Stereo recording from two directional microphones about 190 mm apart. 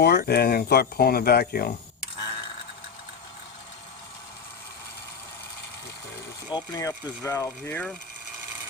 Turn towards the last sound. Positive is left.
turn(degrees=10)  # may be behind; listen again after turning